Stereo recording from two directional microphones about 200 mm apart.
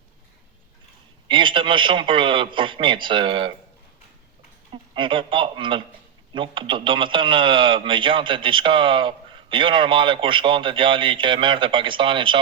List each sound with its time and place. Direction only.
1.3 s speech: 25° right (ahead or behind)
4.7 s speech: 25° right (ahead or behind)